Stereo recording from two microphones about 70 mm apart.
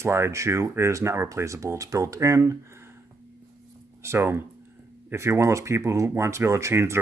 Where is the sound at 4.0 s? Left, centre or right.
Right.